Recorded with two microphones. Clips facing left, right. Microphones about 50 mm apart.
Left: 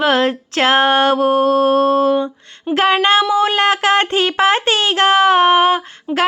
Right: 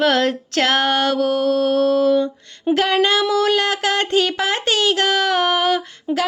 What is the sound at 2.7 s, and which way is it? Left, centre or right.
Child singing, left.